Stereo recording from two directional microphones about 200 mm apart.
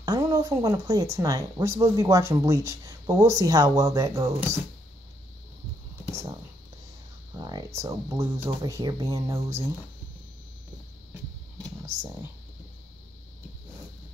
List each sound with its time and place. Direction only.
0.0 s speech: 20° right (ahead or behind)
7.3 s speech: 20° right (ahead or behind)